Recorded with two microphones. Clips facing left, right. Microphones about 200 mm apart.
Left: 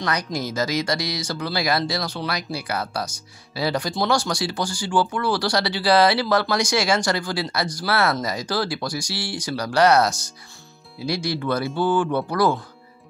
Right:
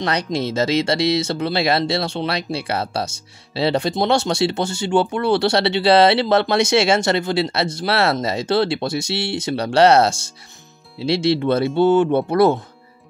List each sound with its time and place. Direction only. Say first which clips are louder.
0.0 s speech: right 4 dB; 25° right (ahead or behind)